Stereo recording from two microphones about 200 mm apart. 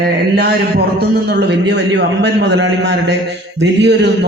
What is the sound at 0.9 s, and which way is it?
Speech, 55° right (ahead or behind).